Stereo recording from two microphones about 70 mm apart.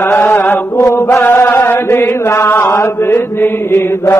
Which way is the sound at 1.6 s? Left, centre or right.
Left.